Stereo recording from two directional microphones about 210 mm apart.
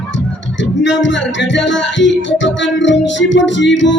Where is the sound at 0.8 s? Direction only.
60° left (ahead or behind).